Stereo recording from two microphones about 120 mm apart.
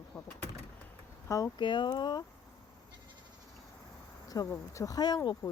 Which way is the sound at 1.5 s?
40° left (ahead or behind).